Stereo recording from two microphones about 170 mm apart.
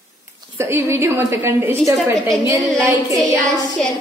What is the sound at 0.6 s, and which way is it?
A woman's voice, 15° right (ahead or behind).